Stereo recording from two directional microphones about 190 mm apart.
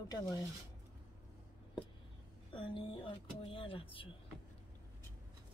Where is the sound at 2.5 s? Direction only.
25° left (ahead or behind).